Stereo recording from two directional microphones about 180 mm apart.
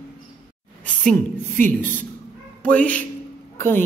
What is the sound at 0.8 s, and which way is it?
A woman's voice, 5° left (ahead or behind).